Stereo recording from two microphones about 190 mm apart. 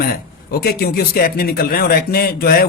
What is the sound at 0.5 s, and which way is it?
Speech, 55° left (ahead or behind).